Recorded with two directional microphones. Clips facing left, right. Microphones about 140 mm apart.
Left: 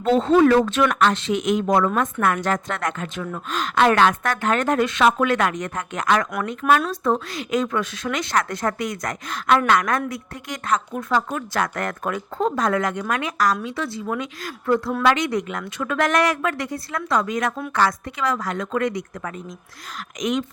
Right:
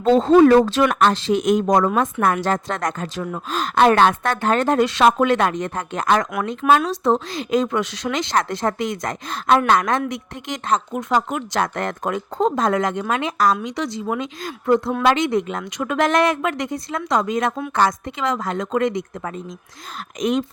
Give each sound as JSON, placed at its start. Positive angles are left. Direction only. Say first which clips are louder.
{"t": 0.0, "sound": "a woman's voice", "louder": "right 3 dB", "side_deg": -35}